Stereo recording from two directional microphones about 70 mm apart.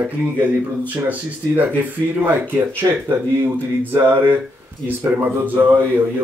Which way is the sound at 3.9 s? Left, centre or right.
Right.